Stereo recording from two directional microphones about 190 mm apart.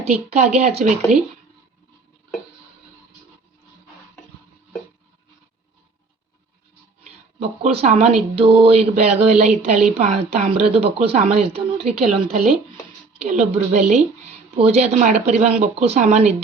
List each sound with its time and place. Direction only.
0.3 s speech: 35° right (ahead or behind)
7.0 s speech: 35° right (ahead or behind)